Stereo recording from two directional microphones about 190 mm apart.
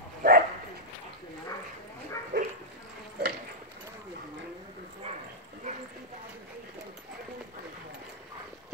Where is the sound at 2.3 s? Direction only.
60° right (ahead or behind).